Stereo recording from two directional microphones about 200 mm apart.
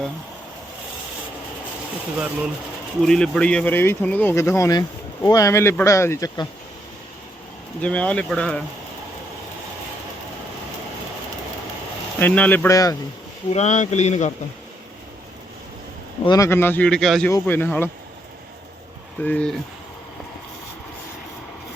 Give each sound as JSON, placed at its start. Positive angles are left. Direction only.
{"t": 3.0, "sound": "speech", "side_deg": 5}
{"t": 7.8, "sound": "speech", "side_deg": 5}
{"t": 12.2, "sound": "speech", "side_deg": 10}
{"t": 13.5, "sound": "speech", "side_deg": 35}
{"t": 16.2, "sound": "speech", "side_deg": 15}
{"t": 19.2, "sound": "speech", "side_deg": 5}